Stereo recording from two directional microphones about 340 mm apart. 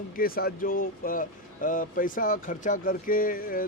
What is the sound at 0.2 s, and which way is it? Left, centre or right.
Speech, left.